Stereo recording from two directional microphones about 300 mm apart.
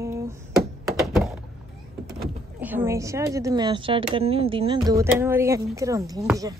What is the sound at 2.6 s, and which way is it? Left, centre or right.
Speech, centre.